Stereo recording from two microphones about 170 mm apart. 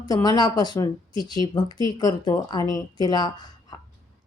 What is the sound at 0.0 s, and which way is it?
A woman's voice, 20° left (ahead or behind).